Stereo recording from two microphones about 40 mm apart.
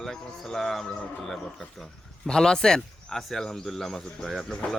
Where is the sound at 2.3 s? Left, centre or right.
Centre.